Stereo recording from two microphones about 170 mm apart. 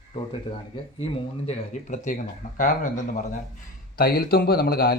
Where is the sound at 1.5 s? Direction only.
45° left (ahead or behind).